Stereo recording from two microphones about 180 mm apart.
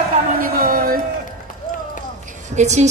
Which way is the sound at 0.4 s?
55° right (ahead or behind).